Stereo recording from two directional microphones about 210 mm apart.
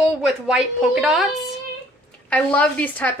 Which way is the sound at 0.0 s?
5° right (ahead or behind).